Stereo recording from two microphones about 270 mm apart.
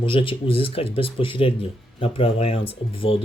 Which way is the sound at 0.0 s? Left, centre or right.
Centre.